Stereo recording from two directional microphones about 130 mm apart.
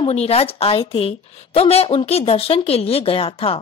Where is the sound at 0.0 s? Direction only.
50° left (ahead or behind).